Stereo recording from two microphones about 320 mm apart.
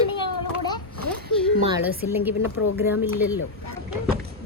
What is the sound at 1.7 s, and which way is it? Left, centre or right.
A woman's voice, centre.